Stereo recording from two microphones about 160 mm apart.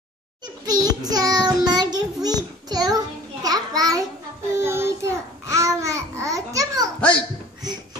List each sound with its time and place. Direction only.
0.7 s child singing: 25° right (ahead or behind)
3.4 s a sound: 25° right (ahead or behind)
4.6 s babbling: 15° right (ahead or behind)
7.0 s a child's voice: 5° left (ahead or behind)